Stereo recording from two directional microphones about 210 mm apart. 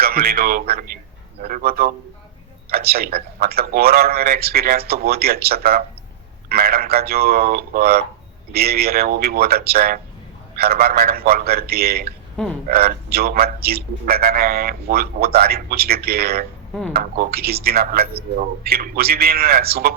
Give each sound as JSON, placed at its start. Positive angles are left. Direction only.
{"t": 0.0, "sound": "a man's voice", "side_deg": -45}